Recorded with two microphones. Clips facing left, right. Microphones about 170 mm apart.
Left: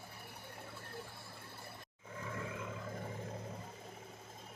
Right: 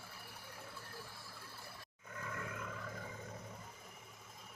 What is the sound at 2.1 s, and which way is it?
Roar, 20° left (ahead or behind).